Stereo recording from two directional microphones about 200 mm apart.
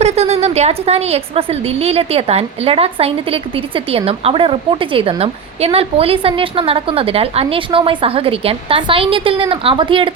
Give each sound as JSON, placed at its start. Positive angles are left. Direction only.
{"t": 0.0, "sound": "a woman's voice", "side_deg": -30}